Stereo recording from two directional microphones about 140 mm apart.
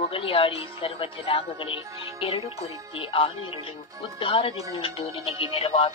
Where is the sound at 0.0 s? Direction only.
40° left (ahead or behind).